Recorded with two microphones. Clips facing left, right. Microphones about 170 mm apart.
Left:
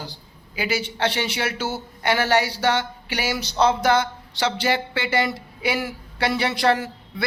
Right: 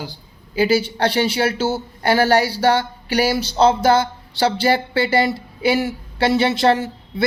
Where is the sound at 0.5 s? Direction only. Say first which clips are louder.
Right 9 dB; 30° right (ahead or behind).